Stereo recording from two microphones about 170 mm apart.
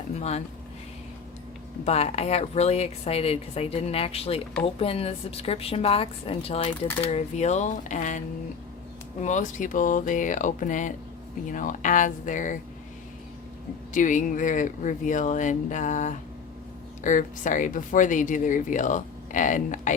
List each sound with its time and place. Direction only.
0.1 s speech: 40° left (ahead or behind)
1.8 s speech: 40° left (ahead or behind)
9.2 s speech: 50° left (ahead or behind)
13.9 s speech: 50° left (ahead or behind)